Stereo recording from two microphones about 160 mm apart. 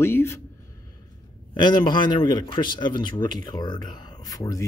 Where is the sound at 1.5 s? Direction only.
30° left (ahead or behind).